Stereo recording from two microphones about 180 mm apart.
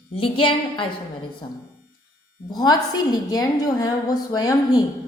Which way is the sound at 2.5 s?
25° left (ahead or behind).